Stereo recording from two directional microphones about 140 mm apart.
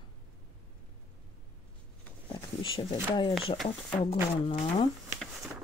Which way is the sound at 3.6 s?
45° left (ahead or behind).